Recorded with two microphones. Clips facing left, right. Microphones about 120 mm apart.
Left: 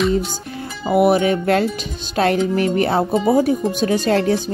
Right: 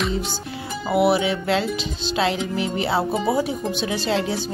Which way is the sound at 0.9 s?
45° left (ahead or behind).